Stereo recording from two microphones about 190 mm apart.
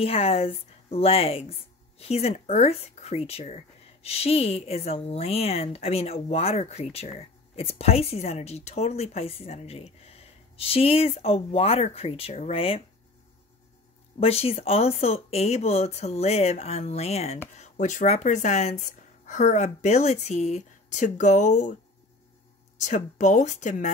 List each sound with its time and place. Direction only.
0.0 s a woman's voice: 30° left (ahead or behind)
14.2 s a woman's voice: 30° left (ahead or behind)
22.8 s a woman's voice: 40° left (ahead or behind)